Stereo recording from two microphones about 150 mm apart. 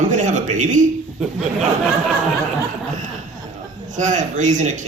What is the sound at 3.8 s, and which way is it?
A man's voice, 55° right (ahead or behind).